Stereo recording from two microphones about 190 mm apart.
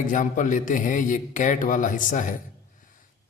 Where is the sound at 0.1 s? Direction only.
40° left (ahead or behind).